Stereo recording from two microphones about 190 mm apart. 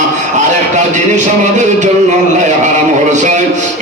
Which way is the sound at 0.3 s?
40° right (ahead or behind).